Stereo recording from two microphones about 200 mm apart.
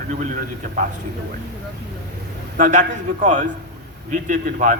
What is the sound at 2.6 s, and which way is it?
A man's voice, 40° right (ahead or behind).